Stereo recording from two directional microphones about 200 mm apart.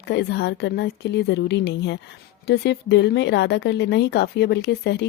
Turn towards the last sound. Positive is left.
turn(degrees=55)  # may be behind; listen again after turning